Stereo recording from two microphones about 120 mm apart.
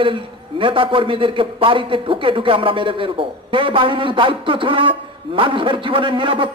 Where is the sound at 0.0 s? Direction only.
45° right (ahead or behind).